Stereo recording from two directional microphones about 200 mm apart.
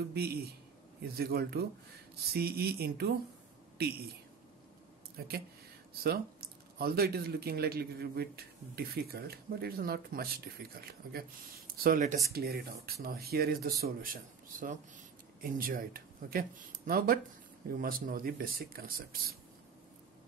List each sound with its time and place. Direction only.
0.1 s speech: 50° right (ahead or behind)
5.2 s speech: 50° right (ahead or behind)